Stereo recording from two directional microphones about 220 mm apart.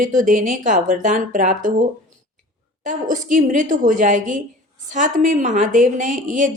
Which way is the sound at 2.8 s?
35° right (ahead or behind).